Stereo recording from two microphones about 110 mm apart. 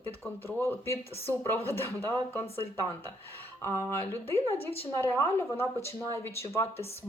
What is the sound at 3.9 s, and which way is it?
Speech, 20° left (ahead or behind).